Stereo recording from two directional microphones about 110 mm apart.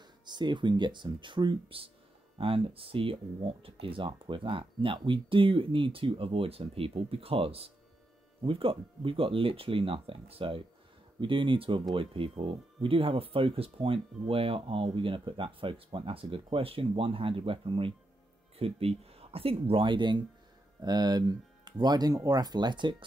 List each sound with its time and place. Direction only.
0.0 s speech: 40° right (ahead or behind)